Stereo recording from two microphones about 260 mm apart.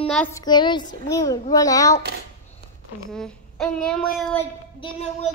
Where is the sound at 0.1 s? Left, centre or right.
Centre.